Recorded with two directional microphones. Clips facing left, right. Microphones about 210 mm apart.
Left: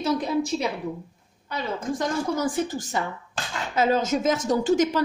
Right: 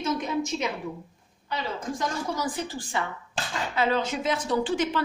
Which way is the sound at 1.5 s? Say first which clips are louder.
Left 3 dB; 50° left (ahead or behind).